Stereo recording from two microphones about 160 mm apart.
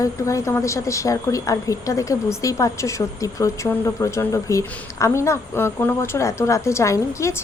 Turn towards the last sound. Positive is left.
turn(degrees=20)  # may be behind; listen again after turning